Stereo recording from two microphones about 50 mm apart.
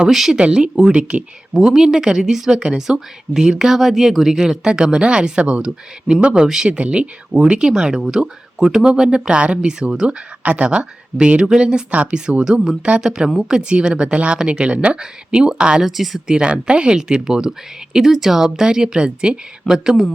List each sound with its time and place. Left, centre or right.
0.1 s speech: centre
0.3 s speech: centre
1.5 s a woman's voice: centre
15.9 s speech: centre
16.2 s a woman's voice: centre